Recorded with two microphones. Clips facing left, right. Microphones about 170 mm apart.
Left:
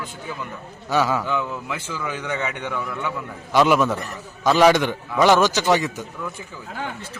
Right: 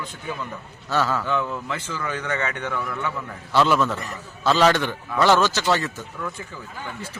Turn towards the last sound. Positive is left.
turn(degrees=15)  # may be behind; listen again after turning